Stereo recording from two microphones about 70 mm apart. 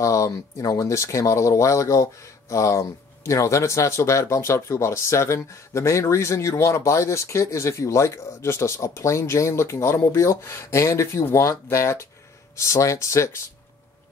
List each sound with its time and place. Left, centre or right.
0.0 s speech: left